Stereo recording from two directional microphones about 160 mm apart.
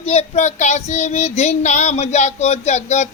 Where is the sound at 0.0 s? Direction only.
40° left (ahead or behind).